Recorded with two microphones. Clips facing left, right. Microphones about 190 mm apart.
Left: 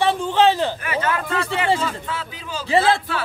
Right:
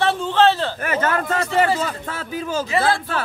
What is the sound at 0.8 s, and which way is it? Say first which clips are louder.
A man's voice: right 2 dB; 45° right (ahead or behind).